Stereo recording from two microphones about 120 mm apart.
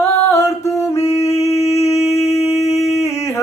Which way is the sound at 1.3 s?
60° left (ahead or behind).